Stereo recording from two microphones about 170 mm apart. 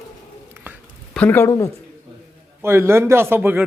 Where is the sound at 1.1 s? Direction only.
10° left (ahead or behind).